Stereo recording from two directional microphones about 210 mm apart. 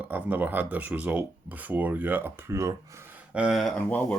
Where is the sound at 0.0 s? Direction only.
5° right (ahead or behind).